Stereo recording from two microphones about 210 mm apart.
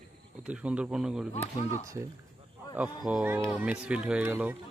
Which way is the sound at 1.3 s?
30° left (ahead or behind).